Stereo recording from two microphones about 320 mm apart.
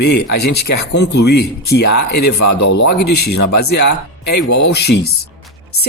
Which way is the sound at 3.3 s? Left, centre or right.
Left.